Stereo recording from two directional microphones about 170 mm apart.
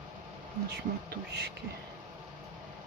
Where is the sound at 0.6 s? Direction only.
75° right (ahead or behind).